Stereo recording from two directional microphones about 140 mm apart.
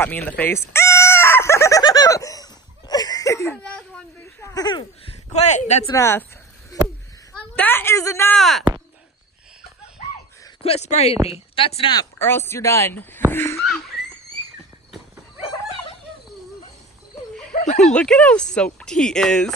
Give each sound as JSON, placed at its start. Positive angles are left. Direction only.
{"t": 0.0, "sound": "speech", "side_deg": 10}
{"t": 0.7, "sound": "chicken", "side_deg": 20}
{"t": 4.4, "sound": "speech", "side_deg": 30}
{"t": 5.3, "sound": "speech", "side_deg": 55}
{"t": 5.9, "sound": "speech", "side_deg": 20}
{"t": 6.7, "sound": "a sound", "side_deg": 25}
{"t": 7.5, "sound": "speech", "side_deg": 15}
{"t": 8.4, "sound": "speech", "side_deg": 0}
{"t": 10.6, "sound": "speech", "side_deg": 50}
{"t": 12.3, "sound": "speech", "side_deg": 15}
{"t": 13.3, "sound": "a sound", "side_deg": 15}
{"t": 13.6, "sound": "a sound", "side_deg": 0}
{"t": 17.5, "sound": "a sound", "side_deg": 55}
{"t": 17.8, "sound": "speech", "side_deg": 5}